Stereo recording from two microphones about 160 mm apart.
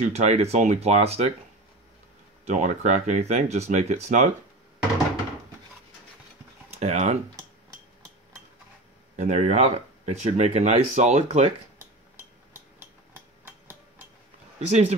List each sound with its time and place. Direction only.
0.0 s speech: 45° right (ahead or behind)
2.4 s speech: 50° right (ahead or behind)
6.7 s a sound: 40° right (ahead or behind)
9.1 s speech: 40° right (ahead or behind)
13.5 s hammer: 10° right (ahead or behind)
14.7 s speech: 45° right (ahead or behind)